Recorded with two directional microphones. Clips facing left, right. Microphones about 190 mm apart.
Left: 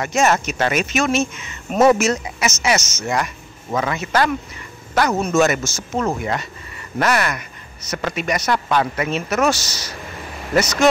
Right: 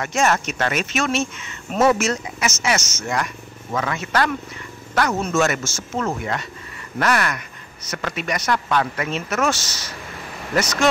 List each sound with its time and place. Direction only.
0.0 s speech: 5° left (ahead or behind)
9.5 s a man's voice: 35° left (ahead or behind)
10.5 s speech: 10° left (ahead or behind)